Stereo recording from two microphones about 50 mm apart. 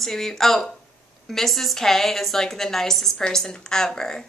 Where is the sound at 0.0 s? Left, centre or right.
Centre.